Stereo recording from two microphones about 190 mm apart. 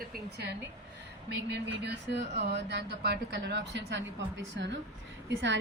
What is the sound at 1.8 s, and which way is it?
A woman's voice, 65° right (ahead or behind).